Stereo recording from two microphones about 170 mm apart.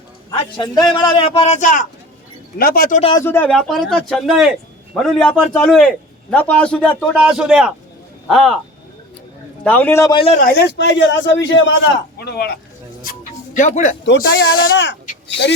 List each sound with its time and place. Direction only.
0.3 s a man's voice: 25° left (ahead or behind); by 1.9 s 50° left (ahead or behind)
2.6 s speech: 60° left (ahead or behind)
3.0 s speech: 30° left (ahead or behind)
3.2 s a man's voice: 15° left (ahead or behind)
3.5 s a man's voice: 5° left (ahead or behind)
9.6 s a man's voice: 10° left (ahead or behind)
10.4 s a man's voice: 80° left
12.2 s speech: 70° left (ahead or behind)
13.0 s music: 50° left (ahead or behind)
14.0 s a man's voice: 80° left